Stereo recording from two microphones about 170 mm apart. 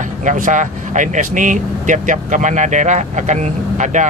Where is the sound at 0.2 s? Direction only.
45° right (ahead or behind).